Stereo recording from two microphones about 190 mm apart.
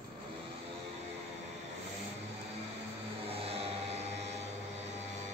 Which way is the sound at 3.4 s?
30° right (ahead or behind).